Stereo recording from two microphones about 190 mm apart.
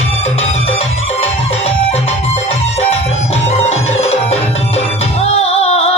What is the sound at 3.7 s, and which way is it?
Music, 35° left (ahead or behind).